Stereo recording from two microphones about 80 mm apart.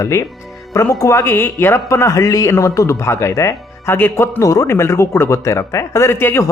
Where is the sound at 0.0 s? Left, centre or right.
Left.